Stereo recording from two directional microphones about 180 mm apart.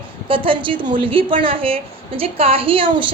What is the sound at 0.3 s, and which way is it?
A woman's voice, 30° right (ahead or behind).